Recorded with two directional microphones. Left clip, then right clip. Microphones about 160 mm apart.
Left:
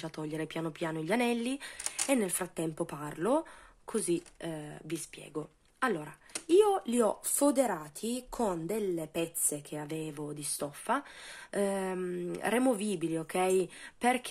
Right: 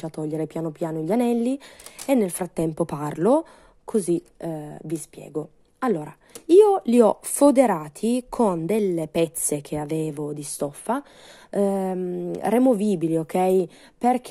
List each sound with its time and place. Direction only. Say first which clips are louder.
0.0 s a woman's voice: right 9 dB; 40° right (ahead or behind)
12.3 s speech: right 10 dB; 40° right (ahead or behind)